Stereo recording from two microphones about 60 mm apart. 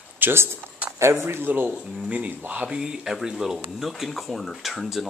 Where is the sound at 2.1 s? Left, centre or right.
Right.